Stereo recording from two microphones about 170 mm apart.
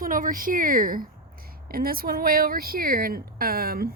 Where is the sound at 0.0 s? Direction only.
55° right (ahead or behind).